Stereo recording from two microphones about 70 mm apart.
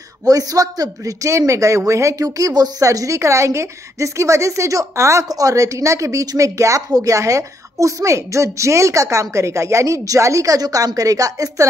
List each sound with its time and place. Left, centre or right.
0.2 s a woman's voice: right
5.3 s a woman's voice: right